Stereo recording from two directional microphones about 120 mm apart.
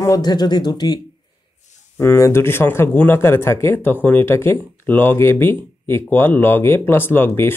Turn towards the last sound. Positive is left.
turn(degrees=20)  # may be behind; listen again after turning